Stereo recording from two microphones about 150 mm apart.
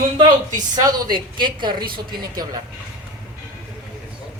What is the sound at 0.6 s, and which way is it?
A woman's voice, 25° right (ahead or behind).